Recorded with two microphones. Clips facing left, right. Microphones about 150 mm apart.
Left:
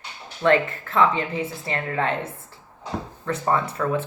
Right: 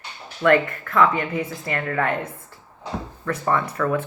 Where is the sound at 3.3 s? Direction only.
25° left (ahead or behind).